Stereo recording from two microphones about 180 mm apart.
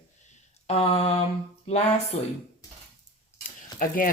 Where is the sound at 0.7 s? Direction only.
35° left (ahead or behind).